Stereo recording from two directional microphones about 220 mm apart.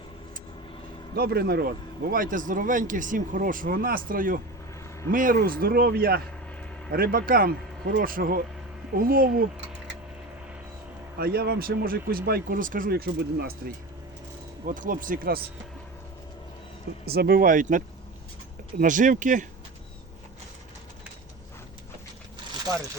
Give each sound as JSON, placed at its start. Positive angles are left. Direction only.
{"t": 1.1, "sound": "speech", "side_deg": -45}
{"t": 11.2, "sound": "speech", "side_deg": -45}
{"t": 14.7, "sound": "speech", "side_deg": -35}
{"t": 17.1, "sound": "speech", "side_deg": -45}